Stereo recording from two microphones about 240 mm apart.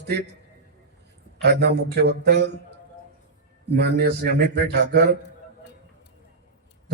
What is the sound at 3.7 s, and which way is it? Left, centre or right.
Speech, right.